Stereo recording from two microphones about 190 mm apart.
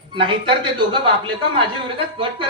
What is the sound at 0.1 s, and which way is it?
A woman's voice, 25° right (ahead or behind).